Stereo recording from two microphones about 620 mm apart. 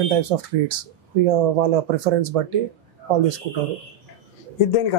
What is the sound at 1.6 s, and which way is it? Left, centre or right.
Speech, right.